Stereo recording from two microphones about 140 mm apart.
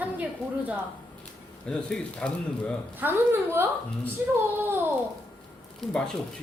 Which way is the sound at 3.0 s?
15° right (ahead or behind).